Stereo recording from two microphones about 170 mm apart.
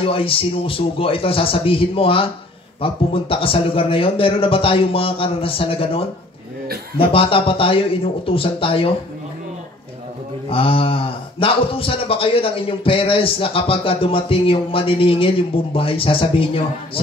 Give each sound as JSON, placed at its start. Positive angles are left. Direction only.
{"t": 0.0, "sound": "speech", "side_deg": 35}
{"t": 10.5, "sound": "speech", "side_deg": 35}